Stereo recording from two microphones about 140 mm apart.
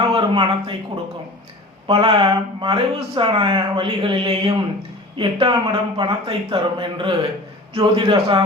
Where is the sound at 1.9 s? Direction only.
40° right (ahead or behind).